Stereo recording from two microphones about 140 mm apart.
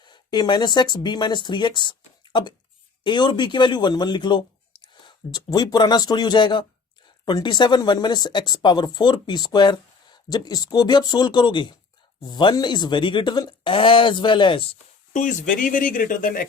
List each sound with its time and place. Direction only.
0.0 s a man's voice: 30° left (ahead or behind)
15.1 s speech: 65° left (ahead or behind)